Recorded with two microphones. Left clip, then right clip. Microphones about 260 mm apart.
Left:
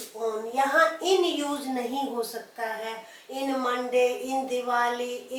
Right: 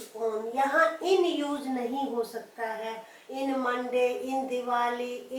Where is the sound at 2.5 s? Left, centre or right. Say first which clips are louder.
Left 2 dB; centre.